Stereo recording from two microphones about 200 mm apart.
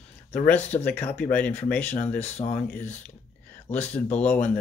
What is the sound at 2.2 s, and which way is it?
Speech, 35° left (ahead or behind).